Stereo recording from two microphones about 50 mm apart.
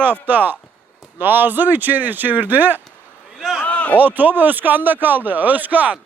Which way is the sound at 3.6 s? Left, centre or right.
Left.